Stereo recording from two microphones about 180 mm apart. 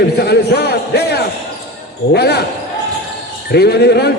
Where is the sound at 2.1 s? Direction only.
65° left (ahead or behind).